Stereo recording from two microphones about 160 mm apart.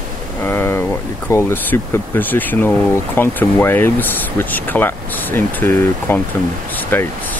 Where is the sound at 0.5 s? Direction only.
15° left (ahead or behind).